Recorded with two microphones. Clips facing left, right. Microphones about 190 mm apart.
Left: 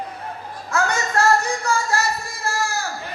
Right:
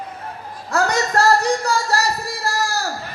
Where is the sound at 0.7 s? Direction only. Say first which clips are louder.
Right 3 dB; 35° right (ahead or behind).